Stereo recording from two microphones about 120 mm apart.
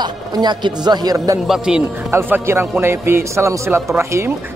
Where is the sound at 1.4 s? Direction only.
5° right (ahead or behind).